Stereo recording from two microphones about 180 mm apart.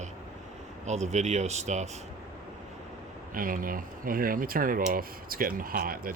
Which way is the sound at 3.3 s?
50° right (ahead or behind).